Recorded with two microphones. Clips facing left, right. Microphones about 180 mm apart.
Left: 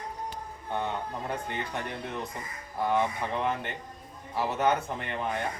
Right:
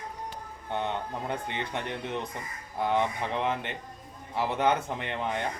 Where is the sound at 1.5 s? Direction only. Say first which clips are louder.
Right 1 dB; 20° right (ahead or behind).